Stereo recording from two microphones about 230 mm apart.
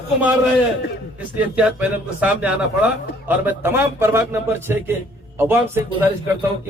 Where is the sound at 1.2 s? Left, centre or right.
Centre.